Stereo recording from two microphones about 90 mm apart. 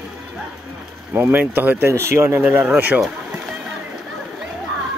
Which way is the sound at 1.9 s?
30° right (ahead or behind).